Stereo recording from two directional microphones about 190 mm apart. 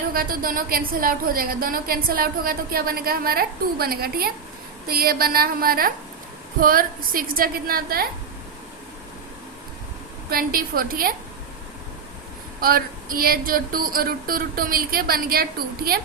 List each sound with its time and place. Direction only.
0.1 s a woman's voice: 50° right (ahead or behind)
10.2 s a woman's voice: 50° right (ahead or behind)
12.5 s a woman's voice: 50° right (ahead or behind)